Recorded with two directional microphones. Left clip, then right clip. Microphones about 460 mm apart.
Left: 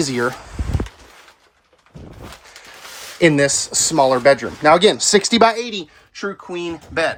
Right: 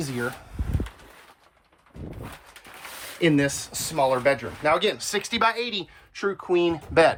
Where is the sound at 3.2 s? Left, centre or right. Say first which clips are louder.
Left 8 dB; centre.